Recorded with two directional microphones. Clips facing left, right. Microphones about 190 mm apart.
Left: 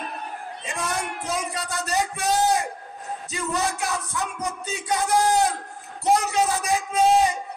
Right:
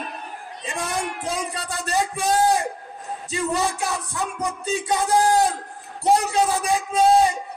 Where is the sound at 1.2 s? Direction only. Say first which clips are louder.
Right 1 dB; 30° right (ahead or behind).